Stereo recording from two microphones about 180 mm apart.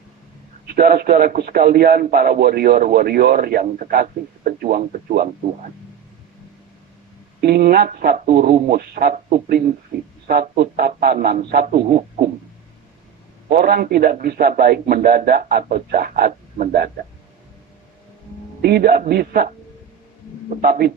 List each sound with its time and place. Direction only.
0.7 s a man's voice: 60° right (ahead or behind)
7.4 s a man's voice: 60° right (ahead or behind)
13.5 s a man's voice: 60° right (ahead or behind)
18.6 s a man's voice: 60° right (ahead or behind)
20.6 s a man's voice: 55° right (ahead or behind)